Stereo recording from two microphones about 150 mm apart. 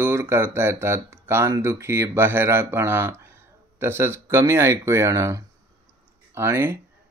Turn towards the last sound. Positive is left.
turn(degrees=-15)  # may be behind; listen again after turning